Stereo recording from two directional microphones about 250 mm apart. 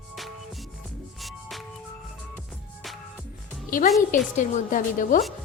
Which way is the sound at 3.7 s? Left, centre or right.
Left.